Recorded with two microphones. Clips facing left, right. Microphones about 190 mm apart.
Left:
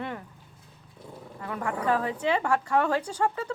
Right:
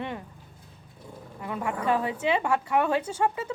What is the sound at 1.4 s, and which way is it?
Speech, 20° right (ahead or behind).